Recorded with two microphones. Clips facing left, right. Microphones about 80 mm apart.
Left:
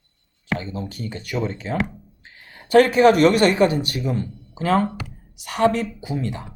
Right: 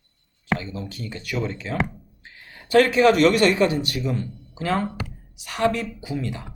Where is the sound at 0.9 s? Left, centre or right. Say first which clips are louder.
Left 2 dB; left.